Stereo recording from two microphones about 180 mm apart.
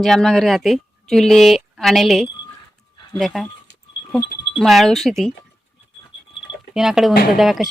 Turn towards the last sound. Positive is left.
turn(degrees=0)  # may be behind; listen again after turning